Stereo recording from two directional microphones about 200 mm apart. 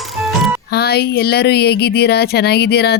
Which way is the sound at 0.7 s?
55° left (ahead or behind).